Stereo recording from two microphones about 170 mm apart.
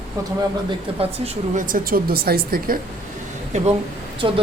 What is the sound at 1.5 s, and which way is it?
Speech, 55° right (ahead or behind).